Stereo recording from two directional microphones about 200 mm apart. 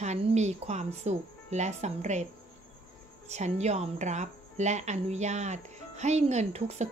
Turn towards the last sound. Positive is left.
turn(degrees=-30)  # may be behind; listen again after turning